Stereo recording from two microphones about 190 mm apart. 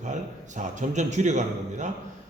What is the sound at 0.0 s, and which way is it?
A man's voice, 40° right (ahead or behind).